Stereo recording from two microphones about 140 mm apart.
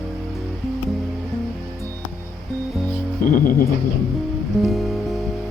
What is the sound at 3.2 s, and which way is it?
Music, 75° left (ahead or behind).